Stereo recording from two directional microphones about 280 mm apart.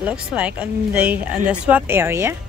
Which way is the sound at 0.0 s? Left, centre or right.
Centre.